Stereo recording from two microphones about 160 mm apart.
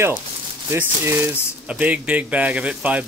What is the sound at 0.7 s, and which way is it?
Speech, 15° right (ahead or behind).